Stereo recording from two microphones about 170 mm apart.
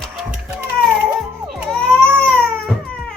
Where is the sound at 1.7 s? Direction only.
5° left (ahead or behind).